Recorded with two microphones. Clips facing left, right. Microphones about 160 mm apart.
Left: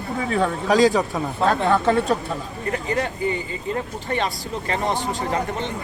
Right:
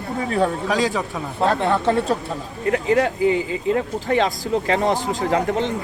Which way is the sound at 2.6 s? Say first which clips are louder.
Right 7 dB; 85° right.